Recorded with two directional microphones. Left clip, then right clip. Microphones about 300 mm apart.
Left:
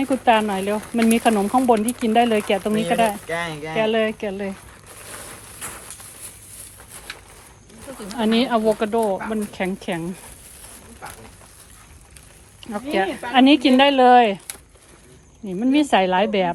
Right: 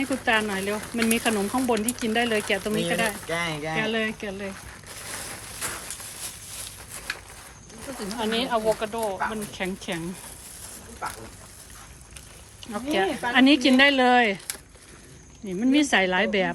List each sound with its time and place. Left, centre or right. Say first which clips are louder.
0.0 s speech: left 6 dB; centre
5.0 s a sound: right 1 dB; centre
8.3 s speech: left 6 dB; left
9.3 s speech: left 6 dB; centre
12.7 s speech: left 3 dB; centre